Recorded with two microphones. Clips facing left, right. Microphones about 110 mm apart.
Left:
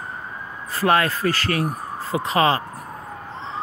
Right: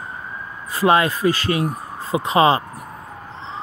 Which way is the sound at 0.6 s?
15° right (ahead or behind).